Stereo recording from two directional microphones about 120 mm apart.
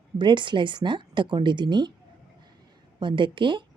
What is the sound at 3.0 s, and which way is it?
Speech, 40° right (ahead or behind).